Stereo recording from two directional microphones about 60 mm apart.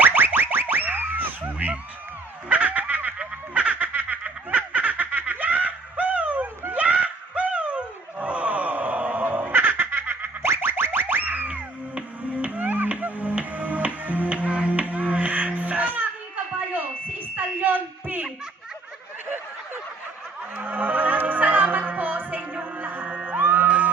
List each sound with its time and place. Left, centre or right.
0.0 s boing: right
2.5 s a sound: right
3.2 s snicker: right
15.1 s music: right
17.3 s a sound: right
20.6 s music: right